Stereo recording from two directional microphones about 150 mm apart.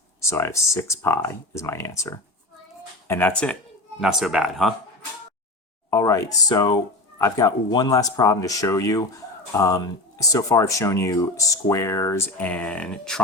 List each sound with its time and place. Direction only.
0.2 s speech: 15° left (ahead or behind)
4.0 s speech: centre (ahead or behind)
5.9 s speech: 20° left (ahead or behind)